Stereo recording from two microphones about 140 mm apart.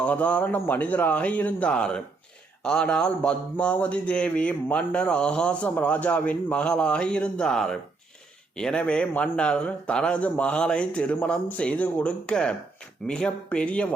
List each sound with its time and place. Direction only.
0.0 s a man's voice: 10° left (ahead or behind)